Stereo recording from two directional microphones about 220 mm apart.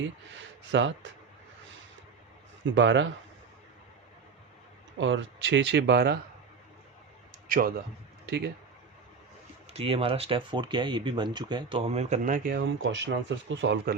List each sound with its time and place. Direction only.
0.7 s speech: 55° right (ahead or behind)
2.6 s speech: 55° right (ahead or behind)
4.9 s speech: 55° right (ahead or behind)
7.4 s a man's voice: 40° right (ahead or behind)
9.7 s speech: 25° right (ahead or behind)
12.5 s speech: 60° right (ahead or behind)